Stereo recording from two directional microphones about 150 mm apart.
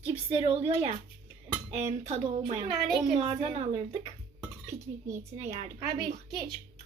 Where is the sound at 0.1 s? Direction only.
40° right (ahead or behind).